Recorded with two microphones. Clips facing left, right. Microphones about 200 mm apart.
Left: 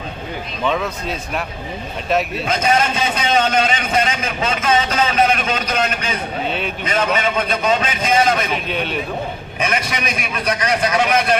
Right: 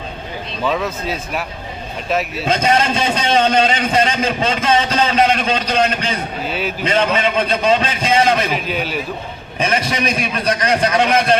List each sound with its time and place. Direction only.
0.6 s a man's voice: 5° right (ahead or behind)
2.5 s a man's voice: 30° right (ahead or behind)
6.4 s a man's voice: 5° right (ahead or behind)
6.8 s a man's voice: 30° right (ahead or behind)
8.5 s a man's voice: centre (ahead or behind)
9.6 s a man's voice: 30° right (ahead or behind)